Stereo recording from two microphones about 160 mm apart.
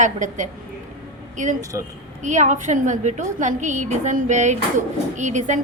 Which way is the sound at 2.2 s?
50° right (ahead or behind).